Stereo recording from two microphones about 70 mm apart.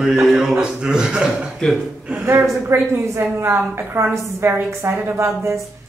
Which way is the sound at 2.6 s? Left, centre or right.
Right.